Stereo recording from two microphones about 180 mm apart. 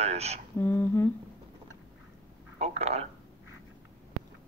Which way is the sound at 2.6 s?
35° right (ahead or behind).